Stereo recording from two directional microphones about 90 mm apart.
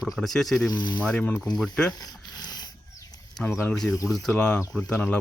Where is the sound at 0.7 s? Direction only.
55° left (ahead or behind).